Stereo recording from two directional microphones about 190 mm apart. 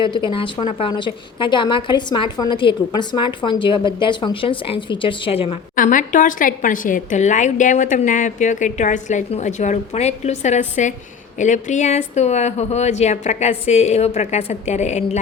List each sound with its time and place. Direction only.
0.0 s a woman's voice: 25° left (ahead or behind)
5.7 s a woman's voice: 45° left (ahead or behind)